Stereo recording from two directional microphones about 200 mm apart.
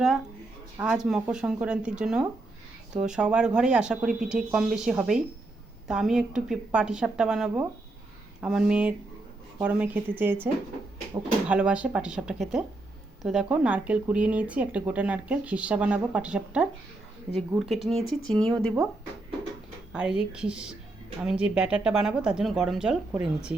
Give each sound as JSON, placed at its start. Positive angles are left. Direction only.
{"t": 0.8, "sound": "speech", "side_deg": -5}
{"t": 17.7, "sound": "speech", "side_deg": 0}
{"t": 18.5, "sound": "speech", "side_deg": -15}
{"t": 19.9, "sound": "speech", "side_deg": -5}